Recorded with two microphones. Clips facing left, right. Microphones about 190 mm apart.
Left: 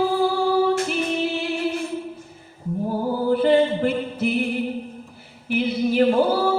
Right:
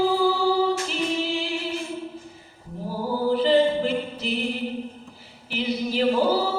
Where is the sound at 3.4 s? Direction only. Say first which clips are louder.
Left 1 dB; 55° left (ahead or behind).